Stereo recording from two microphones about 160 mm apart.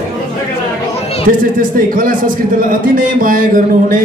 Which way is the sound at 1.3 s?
55° right (ahead or behind).